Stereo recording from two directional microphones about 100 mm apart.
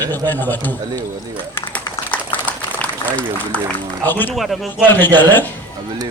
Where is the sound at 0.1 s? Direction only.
20° left (ahead or behind).